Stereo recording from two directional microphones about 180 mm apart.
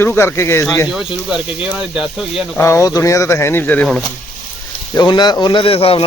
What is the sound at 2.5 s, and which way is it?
Speech, 15° left (ahead or behind).